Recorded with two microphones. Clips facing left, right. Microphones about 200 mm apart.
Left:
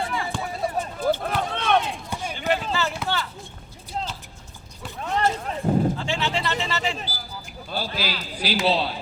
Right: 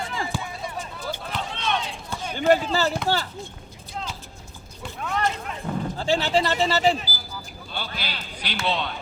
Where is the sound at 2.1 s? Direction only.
15° left (ahead or behind).